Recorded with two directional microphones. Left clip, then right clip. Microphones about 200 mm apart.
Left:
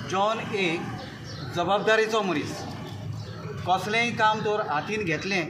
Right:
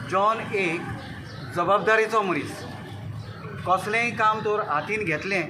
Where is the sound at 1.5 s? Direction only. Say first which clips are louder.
Right 2 dB; 5° right (ahead or behind).